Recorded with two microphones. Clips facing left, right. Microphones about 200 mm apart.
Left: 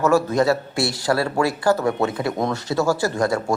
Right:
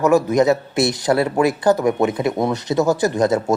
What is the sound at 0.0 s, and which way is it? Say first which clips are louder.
Speech: right 3 dB; 15° right (ahead or behind).